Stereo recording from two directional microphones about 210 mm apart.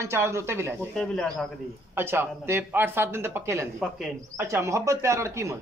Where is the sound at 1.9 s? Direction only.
10° right (ahead or behind).